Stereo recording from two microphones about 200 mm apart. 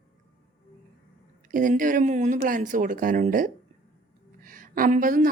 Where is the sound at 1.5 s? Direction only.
40° right (ahead or behind).